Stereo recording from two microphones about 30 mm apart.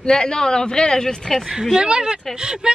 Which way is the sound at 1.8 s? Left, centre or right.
Right.